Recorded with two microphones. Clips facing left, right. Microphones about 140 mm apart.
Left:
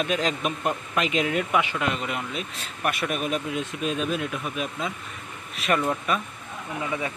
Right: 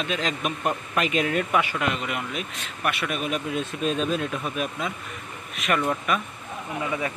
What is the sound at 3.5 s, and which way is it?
Speech, 10° left (ahead or behind).